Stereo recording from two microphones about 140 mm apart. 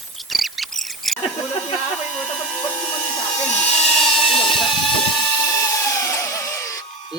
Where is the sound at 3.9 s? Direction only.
Centre (ahead or behind).